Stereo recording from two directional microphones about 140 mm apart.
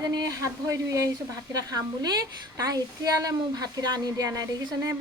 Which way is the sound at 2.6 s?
25° right (ahead or behind).